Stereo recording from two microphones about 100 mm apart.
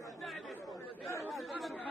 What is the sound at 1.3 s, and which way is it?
Speech, centre (ahead or behind).